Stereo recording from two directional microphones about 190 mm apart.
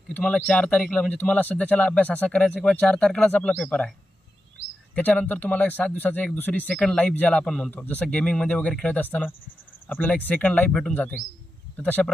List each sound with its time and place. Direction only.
0.1 s speech: 5° left (ahead or behind)
4.9 s speech: 10° left (ahead or behind)